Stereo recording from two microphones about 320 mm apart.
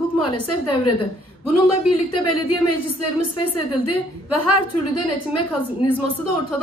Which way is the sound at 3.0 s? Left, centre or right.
Left.